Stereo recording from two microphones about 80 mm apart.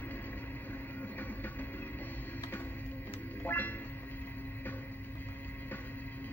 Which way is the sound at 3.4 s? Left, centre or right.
Left.